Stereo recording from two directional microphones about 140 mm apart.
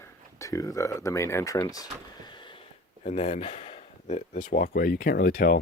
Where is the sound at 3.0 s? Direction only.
50° left (ahead or behind).